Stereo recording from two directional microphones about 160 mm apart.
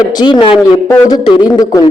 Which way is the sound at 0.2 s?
30° left (ahead or behind).